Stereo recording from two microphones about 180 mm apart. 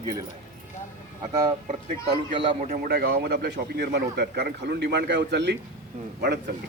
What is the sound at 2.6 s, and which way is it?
A man's voice, 50° right (ahead or behind).